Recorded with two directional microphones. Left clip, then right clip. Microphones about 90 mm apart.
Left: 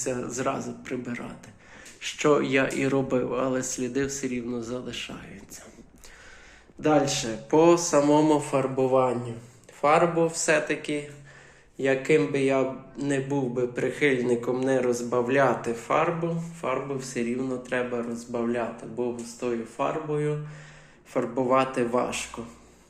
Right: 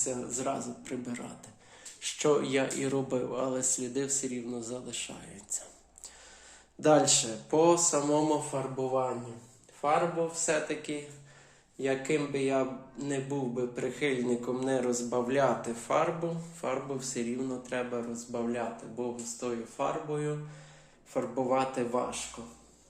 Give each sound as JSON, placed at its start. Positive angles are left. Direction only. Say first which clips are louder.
{"t": 0.0, "sound": "speech", "louder": "left 5 dB", "side_deg": -5}
{"t": 0.3, "sound": "speech", "louder": "left 5 dB", "side_deg": -20}
{"t": 1.0, "sound": "speech", "louder": "left 5 dB", "side_deg": -35}
{"t": 5.2, "sound": "speech", "louder": "right 2 dB", "side_deg": -40}
{"t": 6.8, "sound": "speech", "louder": "left 1 dB", "side_deg": -90}
{"t": 7.3, "sound": "a man's voice", "louder": "left 5 dB", "side_deg": -10}
{"t": 8.7, "sound": "speech", "louder": "left 8 dB", "side_deg": 25}
{"t": 10.5, "sound": "a man's voice", "louder": "left 7 dB", "side_deg": -15}
{"t": 15.8, "sound": "speech", "louder": "left 4 dB", "side_deg": -35}
{"t": 16.2, "sound": "speech", "louder": "left 5 dB", "side_deg": -45}
{"t": 17.2, "sound": "a man's voice", "louder": "left 8 dB", "side_deg": -25}